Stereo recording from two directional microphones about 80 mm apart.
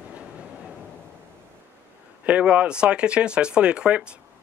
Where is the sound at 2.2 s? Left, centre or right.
Centre.